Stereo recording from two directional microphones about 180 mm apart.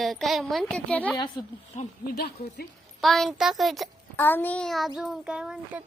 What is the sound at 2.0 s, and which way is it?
Speech, 60° left (ahead or behind).